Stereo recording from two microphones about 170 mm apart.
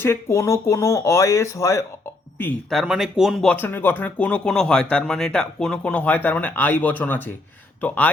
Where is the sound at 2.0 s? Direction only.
15° left (ahead or behind).